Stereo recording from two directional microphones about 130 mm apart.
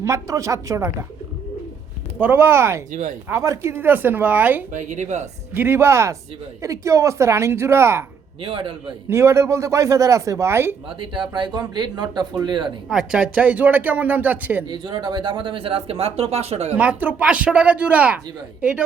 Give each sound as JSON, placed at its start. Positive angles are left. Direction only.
{"t": 0.0, "sound": "speech", "side_deg": -25}
{"t": 2.2, "sound": "speech", "side_deg": -15}
{"t": 2.9, "sound": "speech", "side_deg": -80}
{"t": 3.2, "sound": "speech", "side_deg": -20}
{"t": 4.7, "sound": "speech", "side_deg": -65}
{"t": 5.5, "sound": "speech", "side_deg": -15}
{"t": 8.4, "sound": "speech", "side_deg": -40}
{"t": 9.0, "sound": "speech", "side_deg": -20}
{"t": 10.8, "sound": "speech", "side_deg": -40}
{"t": 12.9, "sound": "speech", "side_deg": -5}
{"t": 14.7, "sound": "speech", "side_deg": -35}
{"t": 16.7, "sound": "speech", "side_deg": -10}